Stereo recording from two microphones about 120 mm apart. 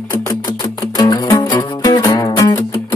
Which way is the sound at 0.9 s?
35° left (ahead or behind).